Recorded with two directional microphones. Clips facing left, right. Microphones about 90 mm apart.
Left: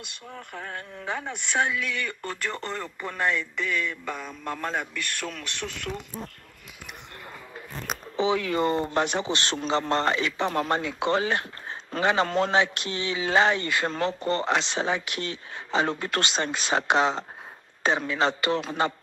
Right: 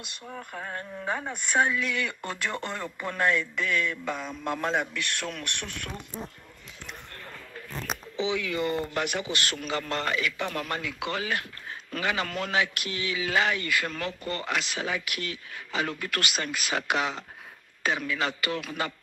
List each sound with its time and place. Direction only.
0.3 s a man's voice: 5° right (ahead or behind)
8.2 s speech: 40° left (ahead or behind)